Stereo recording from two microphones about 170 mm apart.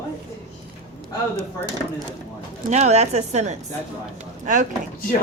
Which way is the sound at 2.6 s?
40° right (ahead or behind).